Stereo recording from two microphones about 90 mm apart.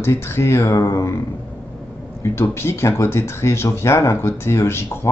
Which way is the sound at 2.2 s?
30° left (ahead or behind).